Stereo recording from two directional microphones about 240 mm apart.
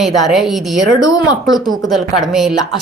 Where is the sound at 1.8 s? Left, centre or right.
Centre.